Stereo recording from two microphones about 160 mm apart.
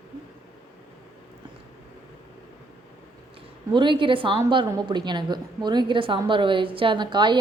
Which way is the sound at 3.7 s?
30° right (ahead or behind).